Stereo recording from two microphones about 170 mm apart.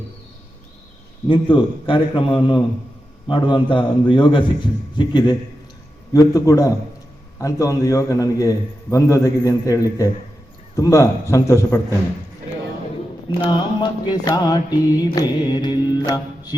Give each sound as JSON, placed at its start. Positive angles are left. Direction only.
{"t": 1.3, "sound": "music", "side_deg": 30}
{"t": 10.8, "sound": "a man's voice", "side_deg": 15}
{"t": 13.4, "sound": "music", "side_deg": 25}